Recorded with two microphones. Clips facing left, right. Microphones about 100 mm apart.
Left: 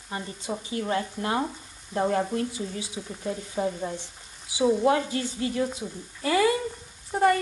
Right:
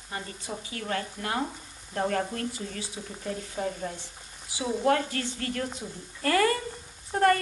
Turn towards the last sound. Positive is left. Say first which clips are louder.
# left 1 dB
turn(degrees=10)  # may be behind; listen again after turning